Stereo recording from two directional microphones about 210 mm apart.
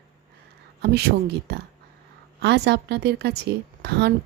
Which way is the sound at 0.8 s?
50° right (ahead or behind).